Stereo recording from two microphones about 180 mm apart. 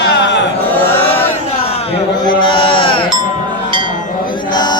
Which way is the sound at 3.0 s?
25° right (ahead or behind).